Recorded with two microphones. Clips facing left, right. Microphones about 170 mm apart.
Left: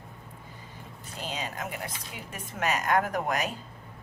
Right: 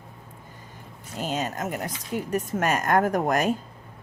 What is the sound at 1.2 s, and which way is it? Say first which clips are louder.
A woman's voice: right 7 dB; 45° right (ahead or behind).